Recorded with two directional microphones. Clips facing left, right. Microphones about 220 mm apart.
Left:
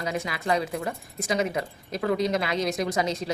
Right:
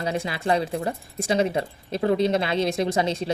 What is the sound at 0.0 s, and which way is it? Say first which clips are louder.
Speech: right 3 dB; 30° right (ahead or behind).